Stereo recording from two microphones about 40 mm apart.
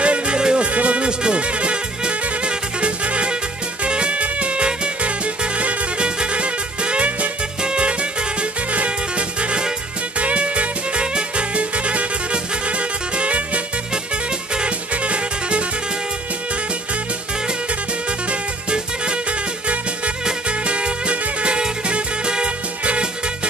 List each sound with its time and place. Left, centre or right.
0.0 s music: right
0.4 s music: centre
0.7 s music: right
14.5 s music: right
18.3 s music: right
20.4 s music: right